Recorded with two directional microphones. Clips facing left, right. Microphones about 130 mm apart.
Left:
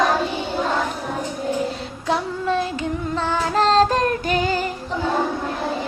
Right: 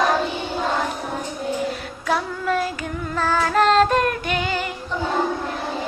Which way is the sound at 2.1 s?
25° left (ahead or behind).